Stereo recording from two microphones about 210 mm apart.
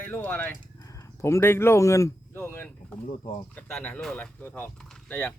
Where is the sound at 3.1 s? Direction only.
40° left (ahead or behind).